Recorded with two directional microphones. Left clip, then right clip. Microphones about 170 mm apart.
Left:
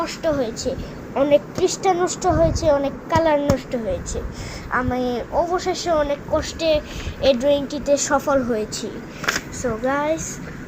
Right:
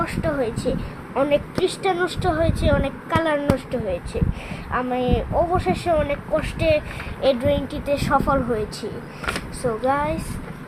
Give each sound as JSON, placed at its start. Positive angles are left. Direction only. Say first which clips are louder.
{"t": 0.0, "sound": "a woman's voice", "louder": "left 2 dB", "side_deg": -15}
{"t": 1.1, "sound": "a woman's voice", "louder": "left 3 dB", "side_deg": -35}
{"t": 4.7, "sound": "a woman's voice", "louder": "even", "side_deg": -15}
{"t": 6.4, "sound": "speech", "louder": "even", "side_deg": -55}
{"t": 7.2, "sound": "a woman's voice", "louder": "left 3 dB", "side_deg": -15}
{"t": 9.6, "sound": "a woman's voice", "louder": "even", "side_deg": -10}